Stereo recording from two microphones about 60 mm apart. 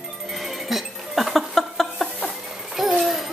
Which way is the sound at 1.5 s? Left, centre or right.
Centre.